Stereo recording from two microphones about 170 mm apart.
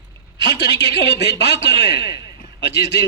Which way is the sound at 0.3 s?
85° left.